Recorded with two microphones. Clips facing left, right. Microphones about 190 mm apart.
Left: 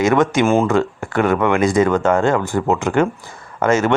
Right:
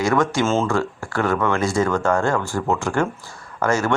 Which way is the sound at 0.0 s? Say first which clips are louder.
Left 4 dB; 20° left (ahead or behind).